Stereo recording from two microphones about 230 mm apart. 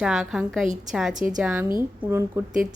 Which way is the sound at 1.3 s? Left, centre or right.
Centre.